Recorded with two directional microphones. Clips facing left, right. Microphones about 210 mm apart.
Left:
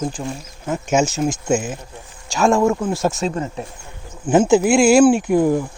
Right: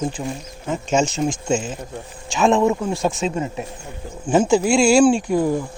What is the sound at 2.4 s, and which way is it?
Speech, 20° right (ahead or behind).